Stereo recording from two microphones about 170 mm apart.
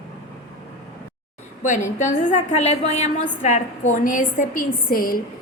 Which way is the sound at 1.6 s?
45° left (ahead or behind).